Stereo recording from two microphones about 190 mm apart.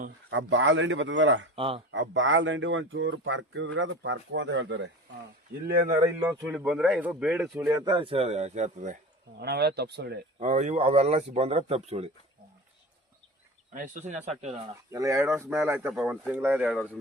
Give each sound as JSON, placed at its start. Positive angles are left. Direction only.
{"t": 0.3, "sound": "speech", "side_deg": -85}
{"t": 1.5, "sound": "speech", "side_deg": -30}
{"t": 1.9, "sound": "speech", "side_deg": -80}
{"t": 6.2, "sound": "speech", "side_deg": -10}
{"t": 7.7, "sound": "speech", "side_deg": -20}
{"t": 9.4, "sound": "speech", "side_deg": -60}
{"t": 10.4, "sound": "speech", "side_deg": -40}
{"t": 13.7, "sound": "speech", "side_deg": -40}
{"t": 14.9, "sound": "speech", "side_deg": -15}